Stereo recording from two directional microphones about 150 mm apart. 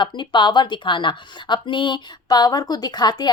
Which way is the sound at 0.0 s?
30° left (ahead or behind).